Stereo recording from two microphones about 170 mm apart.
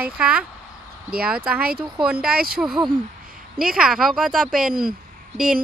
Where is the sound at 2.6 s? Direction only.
Centre (ahead or behind).